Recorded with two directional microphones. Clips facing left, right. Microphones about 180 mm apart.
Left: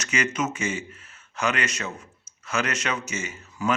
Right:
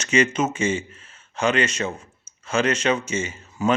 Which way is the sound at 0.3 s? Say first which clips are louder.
Right 5 dB; 30° right (ahead or behind).